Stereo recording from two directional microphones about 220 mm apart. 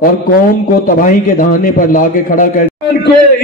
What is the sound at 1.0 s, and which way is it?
A man's voice, 35° left (ahead or behind).